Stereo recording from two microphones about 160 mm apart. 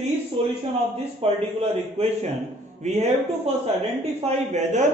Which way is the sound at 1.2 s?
40° right (ahead or behind).